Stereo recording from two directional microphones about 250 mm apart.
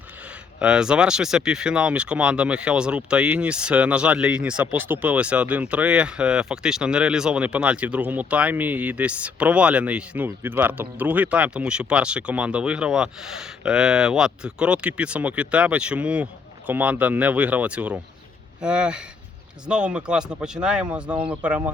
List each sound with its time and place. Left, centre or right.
0.6 s speech: centre